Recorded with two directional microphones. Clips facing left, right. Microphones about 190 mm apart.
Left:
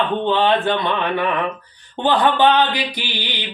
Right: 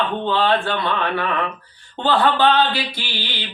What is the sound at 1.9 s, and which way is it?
Speech, 15° left (ahead or behind).